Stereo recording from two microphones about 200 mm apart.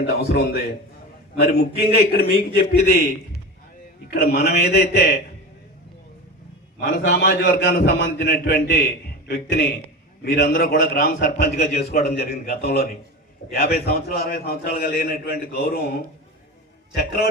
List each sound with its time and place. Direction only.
0.1 s a man's voice: 50° left (ahead or behind)
6.7 s a man's voice: 50° left (ahead or behind)
17.0 s a man's voice: 50° left (ahead or behind)